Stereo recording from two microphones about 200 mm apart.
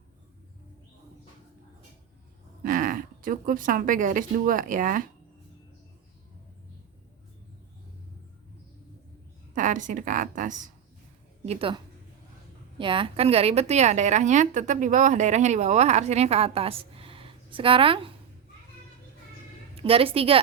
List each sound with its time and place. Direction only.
2.6 s speech: 45° right (ahead or behind)
9.6 s a woman's voice: 40° right (ahead or behind)
11.4 s a woman's voice: 25° right (ahead or behind)
12.8 s a woman's voice: 25° right (ahead or behind)
19.7 s a woman's voice: 30° right (ahead or behind)